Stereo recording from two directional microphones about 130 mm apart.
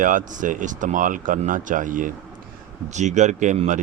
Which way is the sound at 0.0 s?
80° right.